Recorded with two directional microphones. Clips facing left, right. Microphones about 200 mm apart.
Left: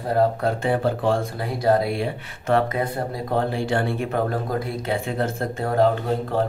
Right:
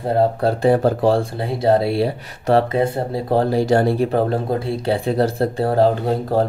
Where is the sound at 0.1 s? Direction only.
30° right (ahead or behind).